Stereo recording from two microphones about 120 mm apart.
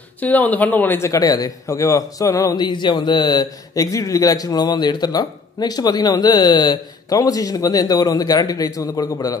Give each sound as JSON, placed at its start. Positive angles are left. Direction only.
{"t": 0.2, "sound": "a man's voice", "side_deg": 15}